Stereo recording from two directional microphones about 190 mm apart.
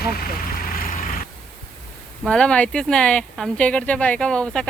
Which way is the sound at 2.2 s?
5° left (ahead or behind).